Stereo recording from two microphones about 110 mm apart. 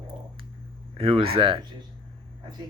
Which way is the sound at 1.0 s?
55° right (ahead or behind).